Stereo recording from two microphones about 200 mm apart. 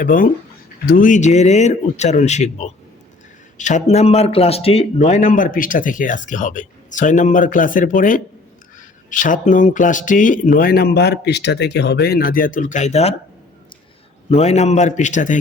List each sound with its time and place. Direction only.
0.0 s a man's voice: 45° left (ahead or behind)
14.3 s a man's voice: 30° left (ahead or behind)